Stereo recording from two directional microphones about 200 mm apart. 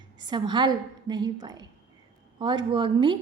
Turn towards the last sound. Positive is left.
turn(degrees=-25)  # may be behind; listen again after turning